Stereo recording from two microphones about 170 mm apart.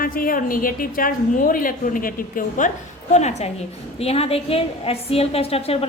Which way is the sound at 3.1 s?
40° left (ahead or behind).